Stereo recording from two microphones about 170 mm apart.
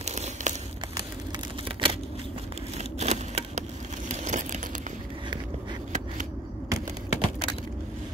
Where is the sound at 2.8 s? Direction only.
40° right (ahead or behind).